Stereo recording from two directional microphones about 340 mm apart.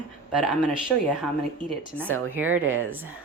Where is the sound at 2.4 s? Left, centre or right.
Right.